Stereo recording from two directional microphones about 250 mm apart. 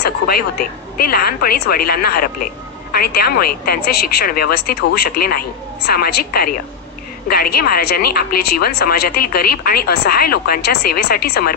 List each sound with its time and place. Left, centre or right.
0.0 s speech: left